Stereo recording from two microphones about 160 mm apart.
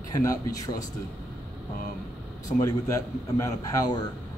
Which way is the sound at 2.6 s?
20° left (ahead or behind).